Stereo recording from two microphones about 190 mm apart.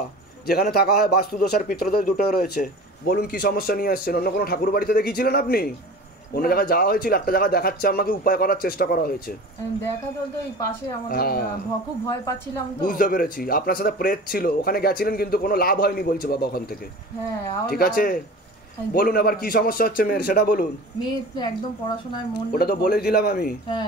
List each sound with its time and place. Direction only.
0.5 s a man's voice: 55° left (ahead or behind)
11.1 s speech: 50° left (ahead or behind)
12.8 s speech: 45° left (ahead or behind)
17.6 s speech: 50° left (ahead or behind)
21.0 s speech: 25° left (ahead or behind)
22.5 s speech: 55° left (ahead or behind)